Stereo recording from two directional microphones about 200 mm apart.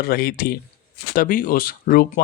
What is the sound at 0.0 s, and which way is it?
Speech, 50° left (ahead or behind).